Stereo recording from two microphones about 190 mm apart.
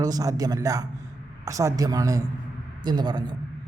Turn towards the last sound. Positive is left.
turn(degrees=-20)  # may be behind; listen again after turning